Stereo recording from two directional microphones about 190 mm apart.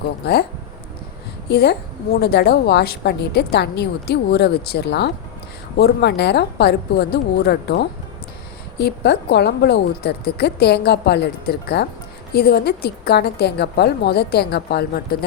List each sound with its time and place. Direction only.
0.2 s a woman's voice: 60° left (ahead or behind)
1.5 s a woman's voice: 60° left (ahead or behind)